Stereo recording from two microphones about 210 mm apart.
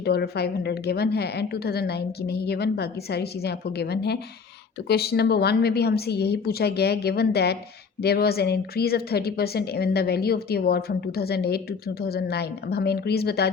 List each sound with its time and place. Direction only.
0.0 s a woman's voice: 50° left (ahead or behind)